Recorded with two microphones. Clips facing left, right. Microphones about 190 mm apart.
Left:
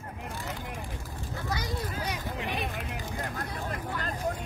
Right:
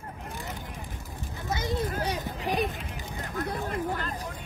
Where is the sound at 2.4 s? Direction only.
40° right (ahead or behind).